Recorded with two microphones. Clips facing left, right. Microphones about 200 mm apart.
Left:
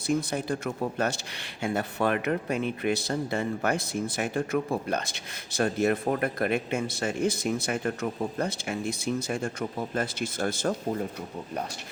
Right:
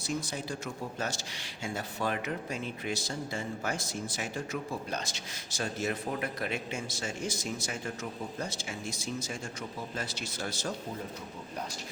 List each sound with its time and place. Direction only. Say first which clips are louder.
0.1 s speech: left 8 dB; 55° left (ahead or behind)